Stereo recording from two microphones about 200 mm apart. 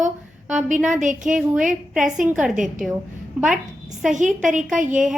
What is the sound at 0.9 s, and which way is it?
Speech, 40° right (ahead or behind).